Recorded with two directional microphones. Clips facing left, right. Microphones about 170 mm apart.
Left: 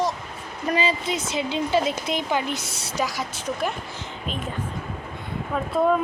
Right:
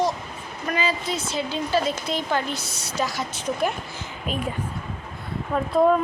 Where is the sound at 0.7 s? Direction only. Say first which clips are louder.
Left 1 dB; 25° left (ahead or behind).